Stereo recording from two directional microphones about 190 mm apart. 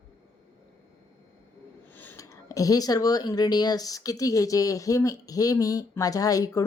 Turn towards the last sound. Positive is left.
turn(degrees=20)  # may be behind; listen again after turning